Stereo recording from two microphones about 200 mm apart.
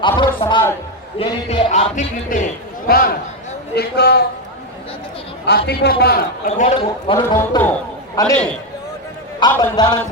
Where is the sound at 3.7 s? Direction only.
55° left (ahead or behind).